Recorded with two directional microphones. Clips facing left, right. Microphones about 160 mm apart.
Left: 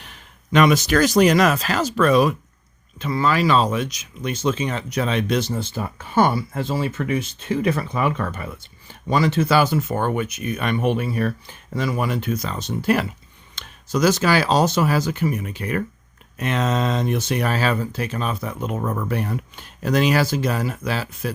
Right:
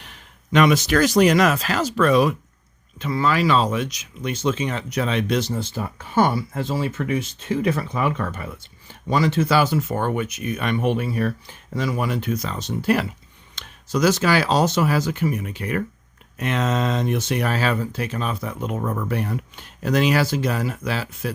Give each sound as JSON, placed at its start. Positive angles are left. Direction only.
{"t": 0.5, "sound": "speech", "side_deg": 40}